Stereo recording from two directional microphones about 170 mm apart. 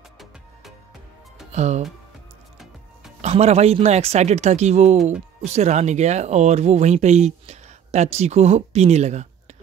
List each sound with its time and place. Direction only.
1.5 s speech: 40° right (ahead or behind)
3.2 s speech: 40° right (ahead or behind)